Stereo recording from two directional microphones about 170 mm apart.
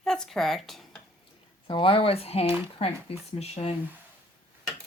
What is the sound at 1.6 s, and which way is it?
Speech, 30° left (ahead or behind).